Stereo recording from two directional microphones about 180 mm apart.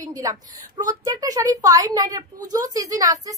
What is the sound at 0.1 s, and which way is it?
A woman's voice, 20° right (ahead or behind).